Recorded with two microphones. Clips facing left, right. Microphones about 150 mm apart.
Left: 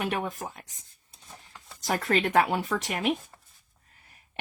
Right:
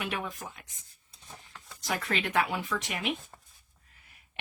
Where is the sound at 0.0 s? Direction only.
45° left (ahead or behind).